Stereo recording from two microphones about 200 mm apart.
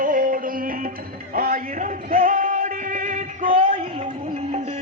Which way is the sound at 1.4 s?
40° right (ahead or behind).